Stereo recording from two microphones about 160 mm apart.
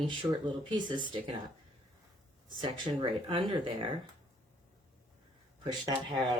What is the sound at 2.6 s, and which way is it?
Speech, 25° right (ahead or behind).